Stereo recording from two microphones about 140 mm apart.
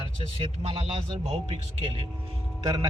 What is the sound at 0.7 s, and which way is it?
Speech, 40° right (ahead or behind).